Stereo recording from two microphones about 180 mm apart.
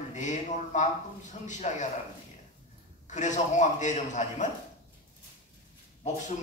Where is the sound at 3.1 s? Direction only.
40° left (ahead or behind).